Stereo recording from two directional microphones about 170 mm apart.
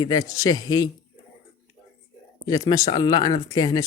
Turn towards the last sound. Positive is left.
turn(degrees=25)  # may be behind; listen again after turning